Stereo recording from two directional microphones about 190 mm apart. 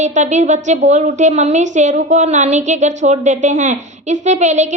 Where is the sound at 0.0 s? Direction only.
40° right (ahead or behind).